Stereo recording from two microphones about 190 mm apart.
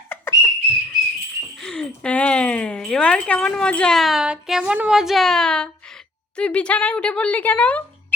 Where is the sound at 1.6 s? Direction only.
Centre (ahead or behind).